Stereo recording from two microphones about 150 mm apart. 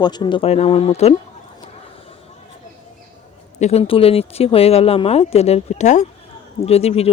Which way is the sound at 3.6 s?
45° left (ahead or behind).